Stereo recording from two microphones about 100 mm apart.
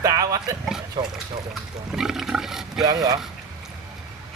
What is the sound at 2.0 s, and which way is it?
Wild animals, 5° right (ahead or behind).